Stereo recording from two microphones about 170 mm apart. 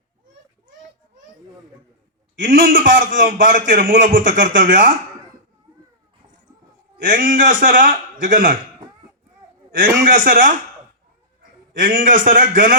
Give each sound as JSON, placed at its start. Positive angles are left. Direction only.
{"t": 2.4, "sound": "a man's voice", "side_deg": -55}
{"t": 7.0, "sound": "a man's voice", "side_deg": -55}
{"t": 10.1, "sound": "a man's voice", "side_deg": -55}
{"t": 11.8, "sound": "a man's voice", "side_deg": -55}